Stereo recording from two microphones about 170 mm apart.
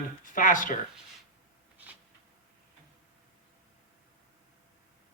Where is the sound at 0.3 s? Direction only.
50° left (ahead or behind).